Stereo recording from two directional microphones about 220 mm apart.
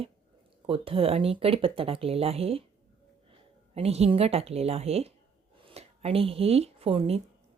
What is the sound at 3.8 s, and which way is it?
Speech, 30° right (ahead or behind).